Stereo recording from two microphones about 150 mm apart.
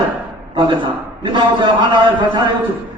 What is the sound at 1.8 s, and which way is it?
Speech, 30° right (ahead or behind).